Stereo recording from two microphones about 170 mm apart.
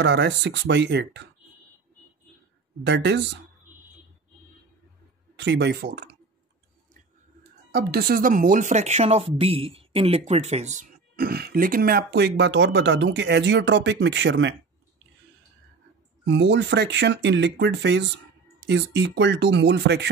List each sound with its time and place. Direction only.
0.0 s speech: 90° right
2.8 s speech: 90° right
5.3 s speech: 90° right; by 6.0 s 70° right (ahead or behind)
7.7 s speech: 65° right (ahead or behind); by 10.9 s 40° right (ahead or behind)
11.1 s speech: 65° right (ahead or behind); by 14.5 s 90° right
16.3 s speech: 90° right